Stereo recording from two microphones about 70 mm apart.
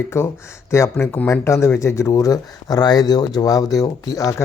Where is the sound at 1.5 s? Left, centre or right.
Left.